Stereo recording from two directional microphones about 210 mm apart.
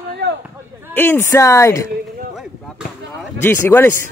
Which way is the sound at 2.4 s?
Centre (ahead or behind).